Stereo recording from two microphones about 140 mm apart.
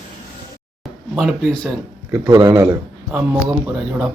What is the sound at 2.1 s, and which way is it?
Speech, 20° right (ahead or behind).